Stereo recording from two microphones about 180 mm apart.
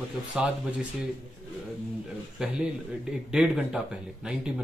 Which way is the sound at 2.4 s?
5° right (ahead or behind).